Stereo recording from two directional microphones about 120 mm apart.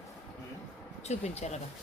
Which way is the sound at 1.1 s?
70° left (ahead or behind).